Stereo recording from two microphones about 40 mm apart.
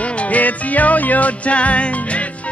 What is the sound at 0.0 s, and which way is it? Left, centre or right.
Music, left.